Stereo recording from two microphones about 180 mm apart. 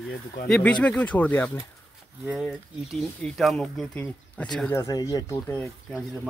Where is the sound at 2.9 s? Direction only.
Centre (ahead or behind).